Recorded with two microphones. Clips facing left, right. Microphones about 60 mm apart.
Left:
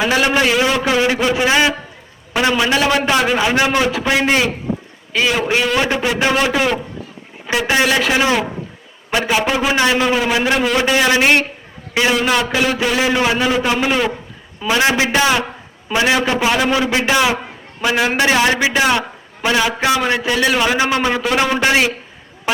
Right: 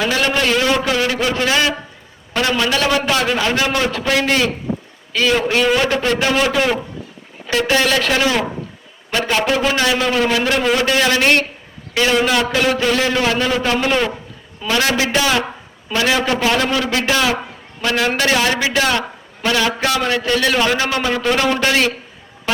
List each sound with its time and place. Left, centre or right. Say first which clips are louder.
0.0 s a man's voice: left 2 dB; centre
7.7 s a man's voice: left 1 dB; centre
22.5 s a sound: left 1 dB; centre